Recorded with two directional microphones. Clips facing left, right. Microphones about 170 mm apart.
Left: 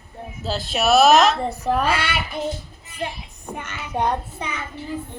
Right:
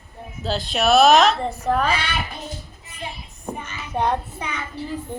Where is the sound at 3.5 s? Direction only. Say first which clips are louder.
Left 5 dB; 75° left (ahead or behind).